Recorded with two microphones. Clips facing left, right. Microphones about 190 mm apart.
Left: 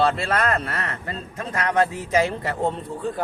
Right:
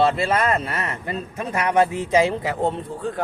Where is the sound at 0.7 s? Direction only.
15° right (ahead or behind).